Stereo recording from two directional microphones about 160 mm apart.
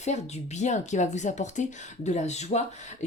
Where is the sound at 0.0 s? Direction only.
45° left (ahead or behind).